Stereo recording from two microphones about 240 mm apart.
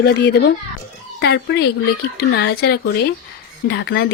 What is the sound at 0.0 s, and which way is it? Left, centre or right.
Speech, left.